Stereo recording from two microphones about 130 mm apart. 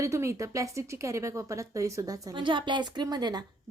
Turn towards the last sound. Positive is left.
turn(degrees=-30)  # may be behind; listen again after turning